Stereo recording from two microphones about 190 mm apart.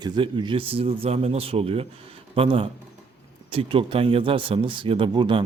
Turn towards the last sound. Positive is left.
turn(degrees=-25)  # may be behind; listen again after turning